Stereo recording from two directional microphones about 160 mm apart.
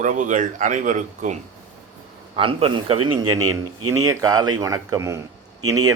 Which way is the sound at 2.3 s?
35° right (ahead or behind).